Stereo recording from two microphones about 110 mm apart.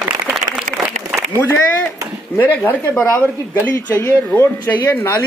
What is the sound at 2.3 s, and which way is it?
Speech, 20° left (ahead or behind).